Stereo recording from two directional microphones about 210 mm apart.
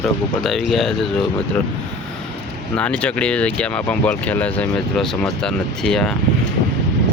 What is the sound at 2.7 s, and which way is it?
Speech, 5° left (ahead or behind).